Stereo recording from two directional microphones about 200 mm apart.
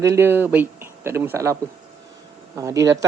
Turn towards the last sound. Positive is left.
turn(degrees=-15)  # may be behind; listen again after turning